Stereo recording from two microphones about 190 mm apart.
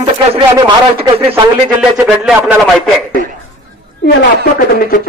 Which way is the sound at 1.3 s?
5° right (ahead or behind).